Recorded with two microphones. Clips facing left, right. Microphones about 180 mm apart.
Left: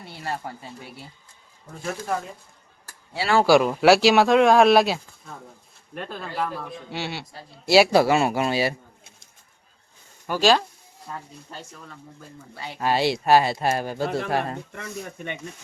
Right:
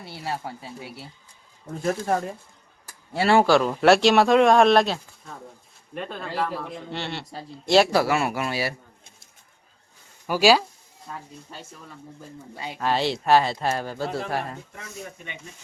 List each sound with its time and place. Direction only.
0.0 s speech: 5° right (ahead or behind)
1.8 s speech: 40° right (ahead or behind)
3.4 s speech: 10° left (ahead or behind)
7.9 s speech: 25° left (ahead or behind)
10.2 s speech: 10° right (ahead or behind)
12.8 s speech: 10° left (ahead or behind)
14.5 s speech: 60° left (ahead or behind)